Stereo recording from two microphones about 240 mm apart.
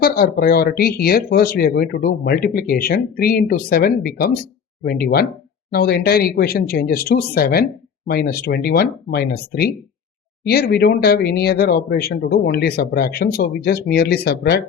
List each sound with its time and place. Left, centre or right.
0.0 s speech: left